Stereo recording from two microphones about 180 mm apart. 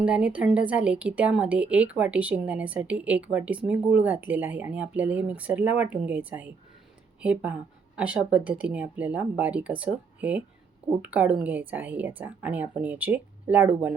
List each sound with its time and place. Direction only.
0.0 s a woman's voice: 5° right (ahead or behind)